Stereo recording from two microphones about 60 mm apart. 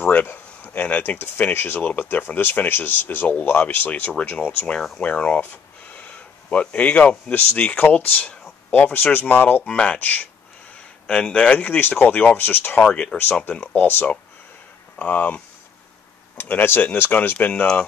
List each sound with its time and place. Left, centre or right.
0.0 s a sound: left
0.6 s speech: left
1.8 s speech: left
9.7 s a man's voice: centre
9.9 s speech: left
11.1 s a man's voice: centre
11.6 s speech: left
12.9 s speech: centre
13.5 s speech: left
16.4 s speech: left